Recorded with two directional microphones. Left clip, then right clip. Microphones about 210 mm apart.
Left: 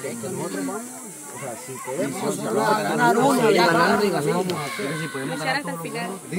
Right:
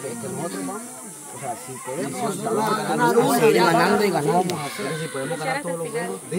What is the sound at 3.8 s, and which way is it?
Speech, 45° right (ahead or behind).